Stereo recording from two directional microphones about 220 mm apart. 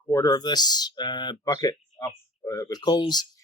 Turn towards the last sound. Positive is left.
turn(degrees=20)  # may be behind; listen again after turning